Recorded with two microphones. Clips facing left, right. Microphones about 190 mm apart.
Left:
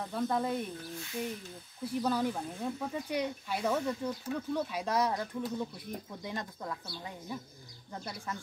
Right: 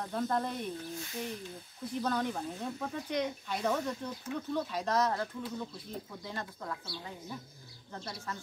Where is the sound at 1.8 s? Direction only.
10° left (ahead or behind).